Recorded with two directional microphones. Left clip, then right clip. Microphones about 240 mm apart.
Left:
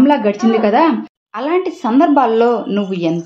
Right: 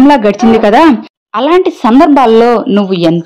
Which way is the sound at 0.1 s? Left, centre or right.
Right.